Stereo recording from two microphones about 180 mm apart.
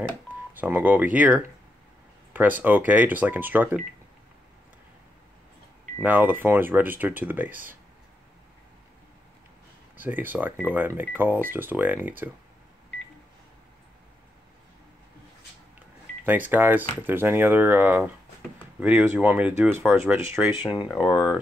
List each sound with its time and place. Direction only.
0.6 s speech: 10° right (ahead or behind)
2.6 s speech: 10° right (ahead or behind)
5.9 s speech: 10° right (ahead or behind)
9.9 s speech: 10° right (ahead or behind)
16.3 s speech: 10° right (ahead or behind)
21.0 s speech: 25° left (ahead or behind)